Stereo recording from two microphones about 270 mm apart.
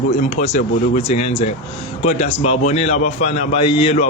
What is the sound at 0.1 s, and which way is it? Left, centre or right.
A man's voice, left.